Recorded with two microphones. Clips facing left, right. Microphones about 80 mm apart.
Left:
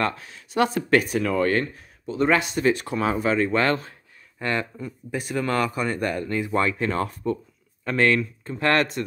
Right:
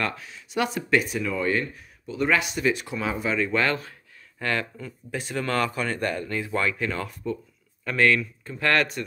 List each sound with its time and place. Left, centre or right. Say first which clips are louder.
0.0 s speech: left 4 dB; left
4.4 s speech: left 1 dB; left
6.5 s speech: left 3 dB; left